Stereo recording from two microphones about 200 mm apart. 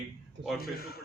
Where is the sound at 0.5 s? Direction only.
50° left (ahead or behind).